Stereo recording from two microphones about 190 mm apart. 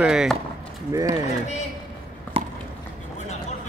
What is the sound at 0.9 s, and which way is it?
Speech, 15° right (ahead or behind).